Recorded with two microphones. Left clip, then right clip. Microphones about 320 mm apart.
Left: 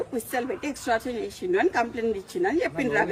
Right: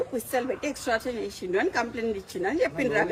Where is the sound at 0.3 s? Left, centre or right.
Centre.